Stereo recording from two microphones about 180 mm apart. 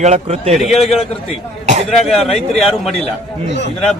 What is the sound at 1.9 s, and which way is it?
Speech, centre (ahead or behind).